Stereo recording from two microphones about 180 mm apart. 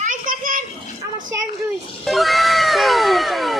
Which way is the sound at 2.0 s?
Centre (ahead or behind).